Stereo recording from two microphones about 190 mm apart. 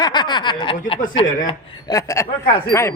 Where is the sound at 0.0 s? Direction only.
25° left (ahead or behind).